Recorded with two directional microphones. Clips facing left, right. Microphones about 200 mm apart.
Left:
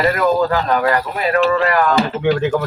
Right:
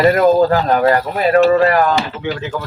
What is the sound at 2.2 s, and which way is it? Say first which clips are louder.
Speech: left 7 dB; 55° left (ahead or behind).